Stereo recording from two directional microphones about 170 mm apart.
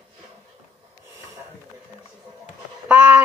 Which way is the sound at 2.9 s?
10° right (ahead or behind).